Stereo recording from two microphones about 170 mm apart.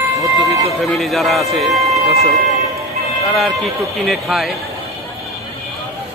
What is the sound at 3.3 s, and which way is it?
Speech, centre (ahead or behind).